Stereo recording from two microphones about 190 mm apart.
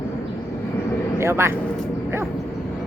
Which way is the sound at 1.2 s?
15° right (ahead or behind).